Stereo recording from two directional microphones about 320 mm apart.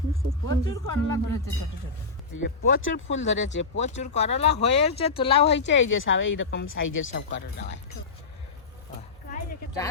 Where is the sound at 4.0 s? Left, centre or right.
Left.